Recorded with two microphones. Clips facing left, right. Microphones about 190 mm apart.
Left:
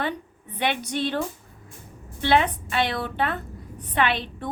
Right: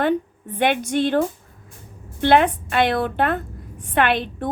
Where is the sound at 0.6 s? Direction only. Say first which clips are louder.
Right 6 dB; 50° right (ahead or behind).